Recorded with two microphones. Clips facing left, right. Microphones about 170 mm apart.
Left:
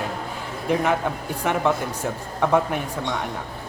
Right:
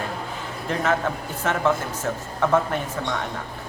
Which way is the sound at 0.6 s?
15° left (ahead or behind).